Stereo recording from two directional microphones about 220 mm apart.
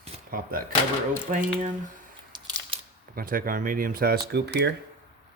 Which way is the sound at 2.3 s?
20° right (ahead or behind).